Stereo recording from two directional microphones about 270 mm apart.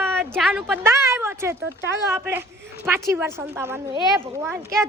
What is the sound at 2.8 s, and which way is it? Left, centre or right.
Speech, centre.